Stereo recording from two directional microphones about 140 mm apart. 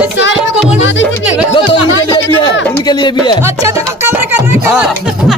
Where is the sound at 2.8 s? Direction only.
30° left (ahead or behind).